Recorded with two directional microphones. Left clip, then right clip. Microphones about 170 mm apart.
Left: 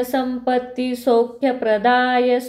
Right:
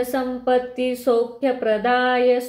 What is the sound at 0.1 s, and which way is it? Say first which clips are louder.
Speech: even; 25° left (ahead or behind).